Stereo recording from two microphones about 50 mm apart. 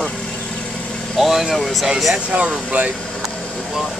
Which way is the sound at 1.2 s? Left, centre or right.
Centre.